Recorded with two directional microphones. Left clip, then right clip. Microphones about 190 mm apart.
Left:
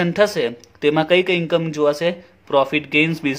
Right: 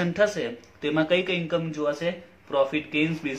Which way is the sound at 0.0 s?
55° left (ahead or behind).